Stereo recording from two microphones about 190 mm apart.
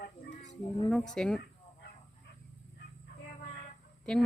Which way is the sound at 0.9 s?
Centre (ahead or behind).